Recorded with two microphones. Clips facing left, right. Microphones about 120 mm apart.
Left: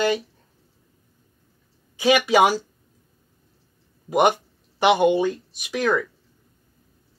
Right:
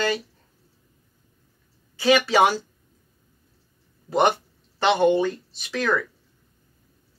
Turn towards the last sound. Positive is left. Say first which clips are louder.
# left 2 dB
turn(degrees=15)  # may be behind; listen again after turning